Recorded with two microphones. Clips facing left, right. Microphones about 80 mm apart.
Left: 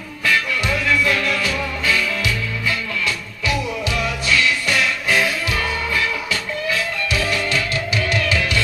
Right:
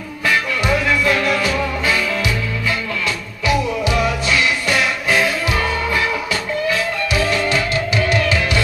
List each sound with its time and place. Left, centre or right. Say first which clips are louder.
0.2 s music: right 2 dB; right